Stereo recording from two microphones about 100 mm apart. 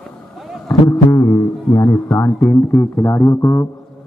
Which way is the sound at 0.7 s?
30° left (ahead or behind).